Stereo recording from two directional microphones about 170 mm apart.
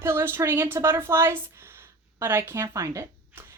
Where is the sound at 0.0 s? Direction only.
15° right (ahead or behind).